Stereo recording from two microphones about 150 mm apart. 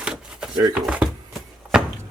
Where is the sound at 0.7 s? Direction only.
5° right (ahead or behind).